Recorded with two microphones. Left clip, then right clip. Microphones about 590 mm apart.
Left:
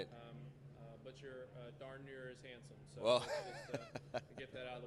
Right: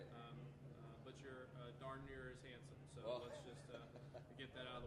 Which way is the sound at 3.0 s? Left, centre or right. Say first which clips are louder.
Left 14 dB; left.